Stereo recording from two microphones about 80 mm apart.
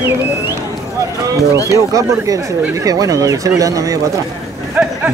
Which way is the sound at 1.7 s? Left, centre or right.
Right.